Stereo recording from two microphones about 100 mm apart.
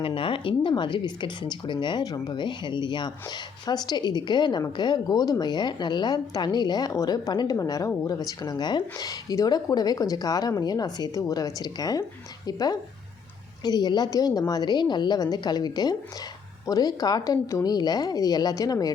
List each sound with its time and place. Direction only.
0.0 s a woman's voice: 60° left (ahead or behind); by 18.9 s 40° left (ahead or behind)